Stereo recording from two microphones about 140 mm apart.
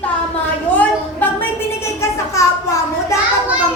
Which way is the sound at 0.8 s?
10° left (ahead or behind).